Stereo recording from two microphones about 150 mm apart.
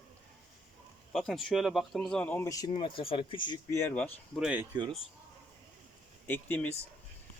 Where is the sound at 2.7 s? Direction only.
35° left (ahead or behind).